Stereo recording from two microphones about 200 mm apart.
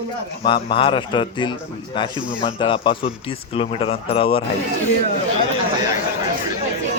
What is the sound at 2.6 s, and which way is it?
A man's voice, 25° left (ahead or behind).